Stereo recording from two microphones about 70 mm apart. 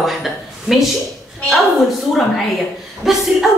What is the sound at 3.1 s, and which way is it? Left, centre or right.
Speech, centre.